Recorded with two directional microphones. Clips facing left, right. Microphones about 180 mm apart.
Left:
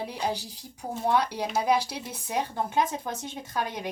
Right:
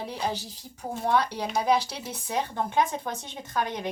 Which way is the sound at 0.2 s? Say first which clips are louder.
Left 1 dB; 10° left (ahead or behind).